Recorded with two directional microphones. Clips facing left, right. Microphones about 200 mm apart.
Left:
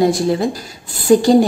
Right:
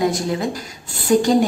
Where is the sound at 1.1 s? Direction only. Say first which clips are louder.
Left 4 dB; 30° left (ahead or behind).